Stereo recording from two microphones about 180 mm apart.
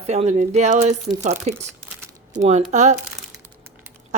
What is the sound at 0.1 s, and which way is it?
Speech, 40° right (ahead or behind).